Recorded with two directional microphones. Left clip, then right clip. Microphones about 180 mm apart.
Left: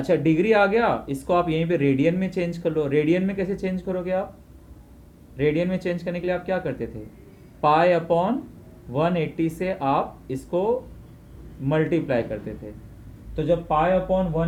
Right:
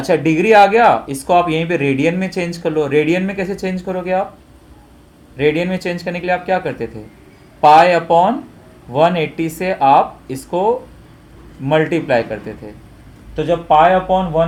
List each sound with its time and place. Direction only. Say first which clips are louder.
0.0 s speech: right 6 dB; 55° right (ahead or behind)
5.4 s speech: right 7 dB; 60° right (ahead or behind)